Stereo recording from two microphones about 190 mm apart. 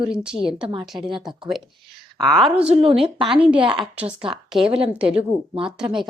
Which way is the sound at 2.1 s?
Centre (ahead or behind).